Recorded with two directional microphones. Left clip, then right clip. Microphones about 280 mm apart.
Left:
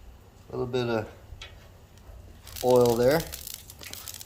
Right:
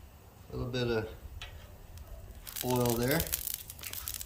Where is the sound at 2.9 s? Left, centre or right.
Centre.